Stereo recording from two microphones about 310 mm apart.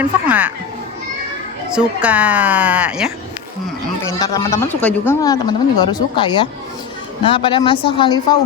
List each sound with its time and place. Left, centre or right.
0.0 s speech: centre
1.7 s speech: centre
4.0 s speech: centre